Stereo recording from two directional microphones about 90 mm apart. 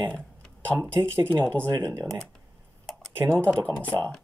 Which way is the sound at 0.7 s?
25° right (ahead or behind).